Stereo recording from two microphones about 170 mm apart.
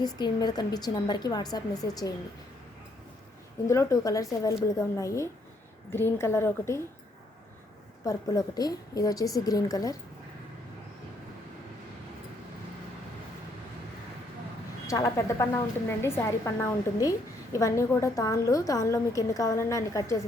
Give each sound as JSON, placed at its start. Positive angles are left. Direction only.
{"t": 0.0, "sound": "a woman's voice", "side_deg": 25}
{"t": 3.7, "sound": "a woman's voice", "side_deg": 15}
{"t": 8.0, "sound": "a woman's voice", "side_deg": 20}
{"t": 14.8, "sound": "a woman's voice", "side_deg": 20}